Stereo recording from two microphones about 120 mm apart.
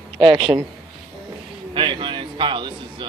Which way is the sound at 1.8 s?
45° right (ahead or behind).